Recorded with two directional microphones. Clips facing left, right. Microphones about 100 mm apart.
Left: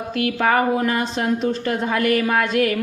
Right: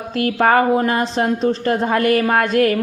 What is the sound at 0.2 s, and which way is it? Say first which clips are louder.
Speech: right 4 dB; 40° right (ahead or behind).